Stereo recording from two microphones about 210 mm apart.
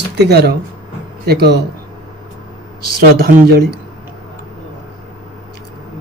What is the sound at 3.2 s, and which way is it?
Speech, 50° right (ahead or behind).